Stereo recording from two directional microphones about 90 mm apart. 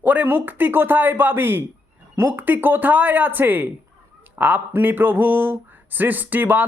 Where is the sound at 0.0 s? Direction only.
20° right (ahead or behind).